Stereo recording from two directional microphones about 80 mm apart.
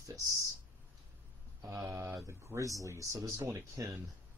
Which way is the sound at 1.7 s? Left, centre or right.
Right.